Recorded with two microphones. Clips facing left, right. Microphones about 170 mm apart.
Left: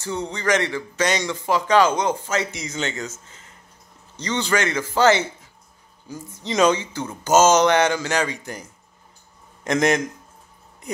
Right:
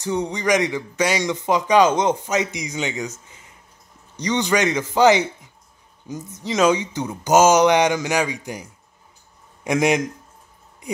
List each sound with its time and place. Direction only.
0.0 s speech: 15° right (ahead or behind)
6.4 s speech: 5° right (ahead or behind)
6.8 s speech: 15° right (ahead or behind)
9.7 s speech: 10° right (ahead or behind)